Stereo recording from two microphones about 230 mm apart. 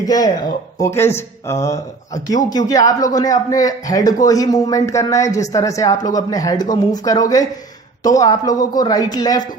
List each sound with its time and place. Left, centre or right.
0.0 s a man's voice: centre